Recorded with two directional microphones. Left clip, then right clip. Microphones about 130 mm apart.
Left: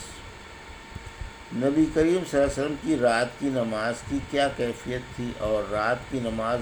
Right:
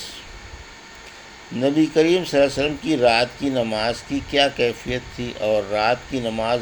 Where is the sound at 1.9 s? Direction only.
40° right (ahead or behind).